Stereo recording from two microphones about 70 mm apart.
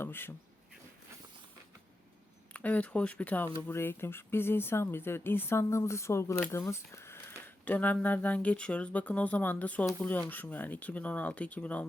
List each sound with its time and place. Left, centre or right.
0.0 s speech: left
2.5 s speech: left
6.5 s a sound: left
7.6 s speech: left